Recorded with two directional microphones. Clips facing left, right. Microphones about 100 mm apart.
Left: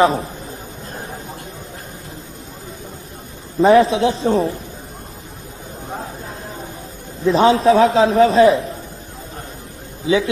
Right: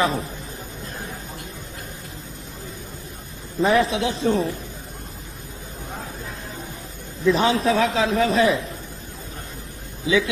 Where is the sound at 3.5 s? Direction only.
30° left (ahead or behind).